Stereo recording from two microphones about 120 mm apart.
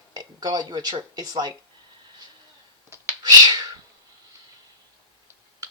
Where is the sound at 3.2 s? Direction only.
35° right (ahead or behind).